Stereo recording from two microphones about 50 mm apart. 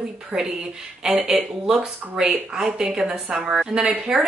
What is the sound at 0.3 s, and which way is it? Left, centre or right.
Speech, centre.